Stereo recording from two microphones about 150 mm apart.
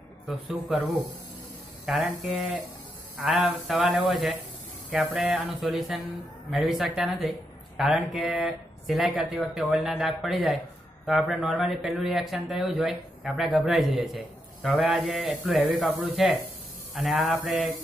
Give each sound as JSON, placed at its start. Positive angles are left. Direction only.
{"t": 0.3, "sound": "a man's voice", "side_deg": -5}
{"t": 1.9, "sound": "a man's voice", "side_deg": 0}